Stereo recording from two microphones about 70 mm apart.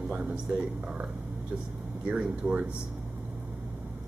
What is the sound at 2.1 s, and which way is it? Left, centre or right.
Speech, centre.